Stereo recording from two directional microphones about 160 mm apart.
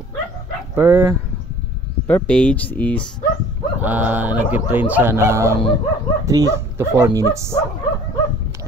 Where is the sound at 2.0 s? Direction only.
10° left (ahead or behind).